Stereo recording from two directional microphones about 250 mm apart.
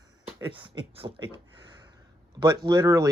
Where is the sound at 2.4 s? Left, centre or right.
Centre.